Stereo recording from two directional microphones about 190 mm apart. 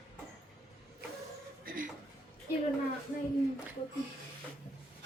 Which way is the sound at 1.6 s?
45° right (ahead or behind).